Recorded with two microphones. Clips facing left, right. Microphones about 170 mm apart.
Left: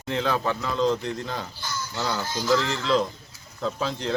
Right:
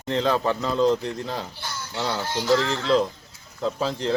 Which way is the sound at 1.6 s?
55° right (ahead or behind).